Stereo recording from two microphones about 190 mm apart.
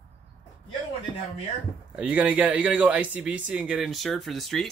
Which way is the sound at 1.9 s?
10° right (ahead or behind).